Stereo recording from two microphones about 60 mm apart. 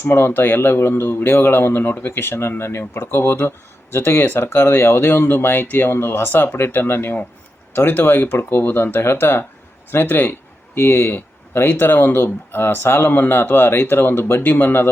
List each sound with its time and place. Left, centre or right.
0.0 s speech: left